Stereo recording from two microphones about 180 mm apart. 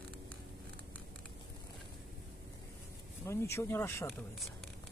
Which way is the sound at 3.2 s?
15° left (ahead or behind).